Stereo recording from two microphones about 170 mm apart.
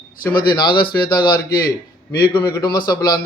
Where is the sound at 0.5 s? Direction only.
30° left (ahead or behind).